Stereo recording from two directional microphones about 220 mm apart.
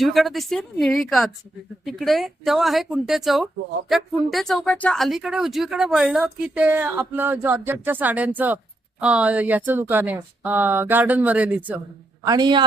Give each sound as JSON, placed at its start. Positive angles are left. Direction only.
{"t": 0.0, "sound": "a woman's voice", "side_deg": 0}
{"t": 12.2, "sound": "speech", "side_deg": -20}